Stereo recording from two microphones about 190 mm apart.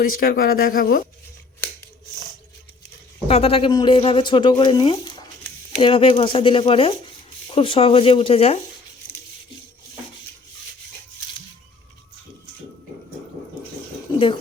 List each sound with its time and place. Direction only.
0.2 s speech: 50° left (ahead or behind)
3.2 s speech: 30° left (ahead or behind)
14.1 s a sound: 25° left (ahead or behind)